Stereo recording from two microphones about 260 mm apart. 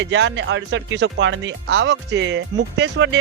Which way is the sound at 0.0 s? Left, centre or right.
Right.